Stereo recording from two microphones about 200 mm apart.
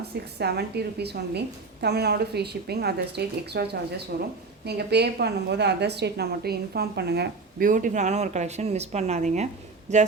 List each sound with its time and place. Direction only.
0.3 s a woman's voice: 55° right (ahead or behind); by 10.0 s 35° right (ahead or behind)